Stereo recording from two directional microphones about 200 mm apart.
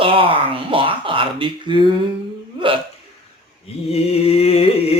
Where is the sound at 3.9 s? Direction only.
30° left (ahead or behind).